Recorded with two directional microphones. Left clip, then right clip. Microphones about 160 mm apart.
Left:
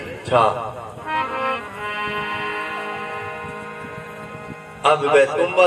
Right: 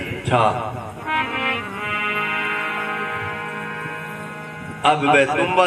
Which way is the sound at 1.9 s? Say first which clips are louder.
Right 3 dB; 35° left (ahead or behind).